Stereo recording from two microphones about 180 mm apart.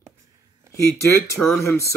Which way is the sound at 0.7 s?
15° left (ahead or behind).